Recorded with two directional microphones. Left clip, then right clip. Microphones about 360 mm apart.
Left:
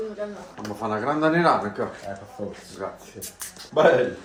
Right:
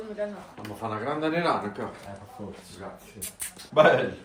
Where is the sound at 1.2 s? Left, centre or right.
Centre.